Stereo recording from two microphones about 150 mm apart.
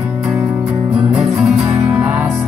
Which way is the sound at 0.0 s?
15° right (ahead or behind).